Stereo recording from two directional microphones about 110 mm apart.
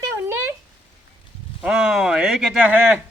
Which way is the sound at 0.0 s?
25° right (ahead or behind).